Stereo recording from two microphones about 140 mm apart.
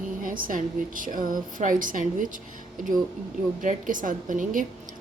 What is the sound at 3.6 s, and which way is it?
A woman's voice, 70° right (ahead or behind).